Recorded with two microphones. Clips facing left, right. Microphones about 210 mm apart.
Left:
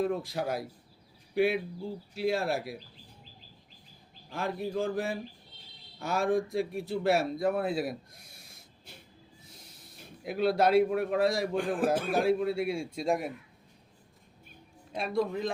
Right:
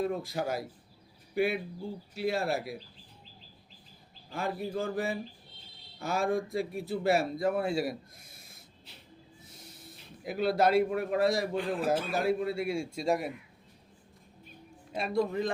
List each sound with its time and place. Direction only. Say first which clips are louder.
0.3 s speech: even; centre (ahead or behind)
4.3 s speech: left 1 dB; centre (ahead or behind)
9.5 s snort: right 4 dB; centre (ahead or behind)
10.2 s speech: left 1 dB; centre (ahead or behind)
11.5 s a man's voice: left 2 dB; 50° left (ahead or behind)
12.2 s speech: left 2 dB; centre (ahead or behind)
14.9 s speech: right 1 dB; centre (ahead or behind)